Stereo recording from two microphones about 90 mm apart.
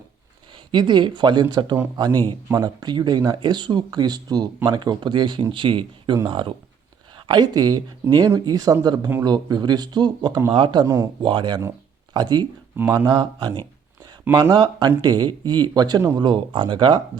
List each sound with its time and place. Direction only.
0.5 s speech: 60° right (ahead or behind)
10.5 s speech: 60° right (ahead or behind)
10.8 s speech: 35° right (ahead or behind)
11.2 s speech: 60° right (ahead or behind)
14.5 s speech: 50° right (ahead or behind)